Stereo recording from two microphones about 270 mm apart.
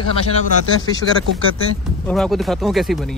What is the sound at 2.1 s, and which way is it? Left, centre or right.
Speech, centre.